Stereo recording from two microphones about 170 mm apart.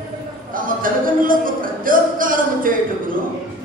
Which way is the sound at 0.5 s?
55° right (ahead or behind).